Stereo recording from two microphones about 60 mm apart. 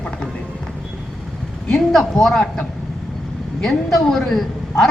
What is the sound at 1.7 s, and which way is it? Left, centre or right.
Speech, centre.